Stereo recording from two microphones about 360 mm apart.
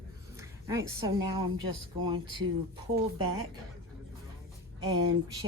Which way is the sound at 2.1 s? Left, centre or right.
Centre.